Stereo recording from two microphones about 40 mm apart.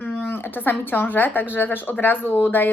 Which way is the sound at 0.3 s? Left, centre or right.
Left.